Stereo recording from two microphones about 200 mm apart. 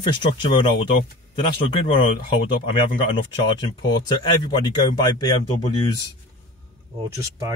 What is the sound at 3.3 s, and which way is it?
Speech, 25° left (ahead or behind).